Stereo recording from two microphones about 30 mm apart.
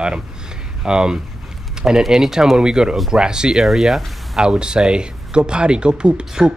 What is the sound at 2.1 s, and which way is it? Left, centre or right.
Speech, centre.